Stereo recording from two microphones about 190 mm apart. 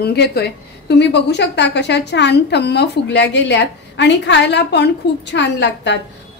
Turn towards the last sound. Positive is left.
turn(degrees=65)  # may be behind; listen again after turning